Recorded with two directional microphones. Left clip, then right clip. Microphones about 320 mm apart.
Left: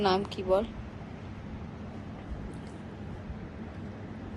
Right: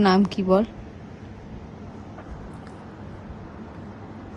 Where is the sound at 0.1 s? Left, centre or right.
Right.